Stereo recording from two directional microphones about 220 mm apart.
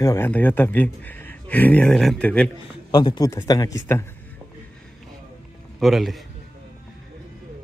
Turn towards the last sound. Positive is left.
turn(degrees=0)  # may be behind; listen again after turning